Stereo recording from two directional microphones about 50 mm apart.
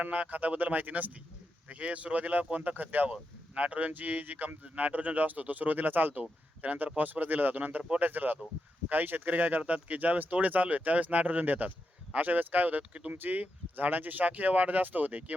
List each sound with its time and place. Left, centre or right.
0.0 s speech: right
3.1 s speech: right
7.8 s speech: right
8.0 s speech: right